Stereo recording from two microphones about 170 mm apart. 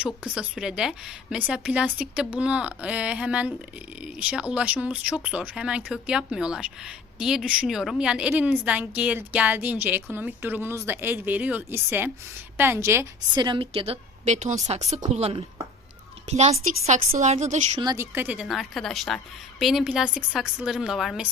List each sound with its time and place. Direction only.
0.0 s a woman's voice: 5° right (ahead or behind); by 17.7 s 40° right (ahead or behind)
17.7 s a woman's voice: 20° right (ahead or behind); by 21.2 s centre (ahead or behind)